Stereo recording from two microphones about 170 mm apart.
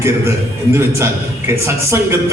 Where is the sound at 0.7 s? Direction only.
15° right (ahead or behind).